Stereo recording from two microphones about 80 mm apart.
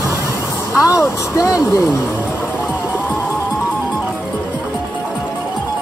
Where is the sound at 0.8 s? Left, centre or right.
Left.